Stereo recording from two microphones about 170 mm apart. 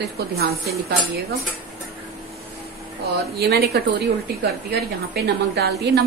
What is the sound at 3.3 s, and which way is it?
A woman's voice, 70° right (ahead or behind).